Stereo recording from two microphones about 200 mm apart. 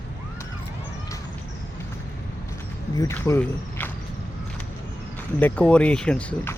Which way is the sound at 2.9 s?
15° left (ahead or behind).